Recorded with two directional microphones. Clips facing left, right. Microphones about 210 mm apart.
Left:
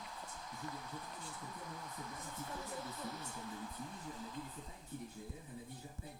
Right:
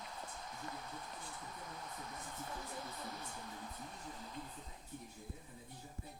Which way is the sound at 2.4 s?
40° right (ahead or behind).